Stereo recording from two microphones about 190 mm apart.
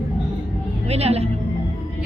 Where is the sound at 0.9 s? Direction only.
35° right (ahead or behind).